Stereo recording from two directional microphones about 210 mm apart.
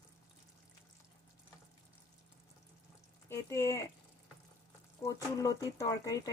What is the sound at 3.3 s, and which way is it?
Speech, 15° left (ahead or behind).